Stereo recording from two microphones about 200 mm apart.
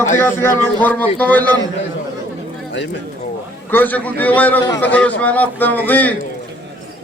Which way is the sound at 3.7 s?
10° left (ahead or behind).